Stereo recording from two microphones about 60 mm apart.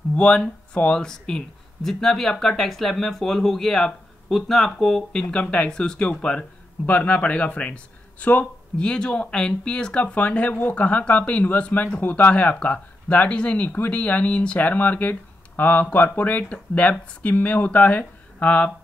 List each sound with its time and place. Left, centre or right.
0.1 s speech: centre
5.3 s speech: left
8.7 s speech: centre